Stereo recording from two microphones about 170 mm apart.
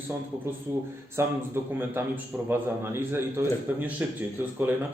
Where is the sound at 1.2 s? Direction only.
15° right (ahead or behind).